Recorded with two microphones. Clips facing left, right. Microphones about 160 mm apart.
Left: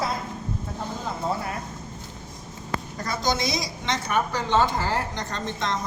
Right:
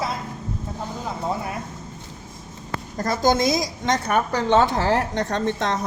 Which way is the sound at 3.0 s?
45° right (ahead or behind).